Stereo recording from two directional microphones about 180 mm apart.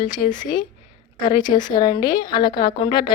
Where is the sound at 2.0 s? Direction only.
25° left (ahead or behind).